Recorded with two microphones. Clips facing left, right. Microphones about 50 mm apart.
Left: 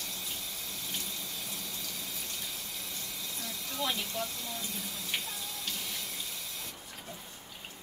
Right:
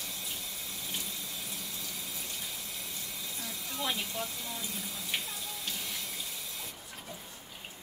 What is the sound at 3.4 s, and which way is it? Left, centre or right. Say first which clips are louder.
Speech: left 2 dB; centre.